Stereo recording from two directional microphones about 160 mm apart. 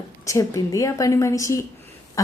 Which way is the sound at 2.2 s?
20° left (ahead or behind).